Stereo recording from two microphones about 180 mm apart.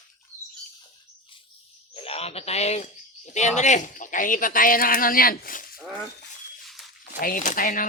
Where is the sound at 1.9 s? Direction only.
35° left (ahead or behind); by 5.8 s 55° left (ahead or behind).